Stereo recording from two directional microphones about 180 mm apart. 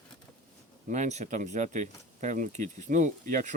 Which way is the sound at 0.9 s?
40° right (ahead or behind).